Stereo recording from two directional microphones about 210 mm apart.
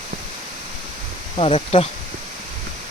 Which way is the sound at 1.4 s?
30° left (ahead or behind).